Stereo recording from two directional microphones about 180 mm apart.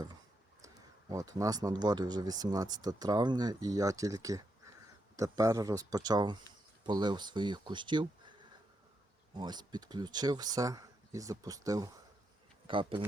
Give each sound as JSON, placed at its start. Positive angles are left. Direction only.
{"t": 1.1, "sound": "speech", "side_deg": -20}
{"t": 9.4, "sound": "speech", "side_deg": -25}